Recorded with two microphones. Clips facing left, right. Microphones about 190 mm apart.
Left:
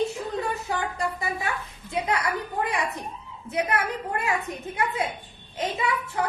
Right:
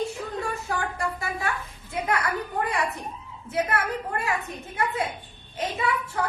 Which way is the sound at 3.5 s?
15° left (ahead or behind).